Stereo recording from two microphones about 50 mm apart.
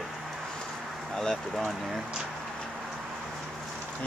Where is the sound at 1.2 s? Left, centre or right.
Centre.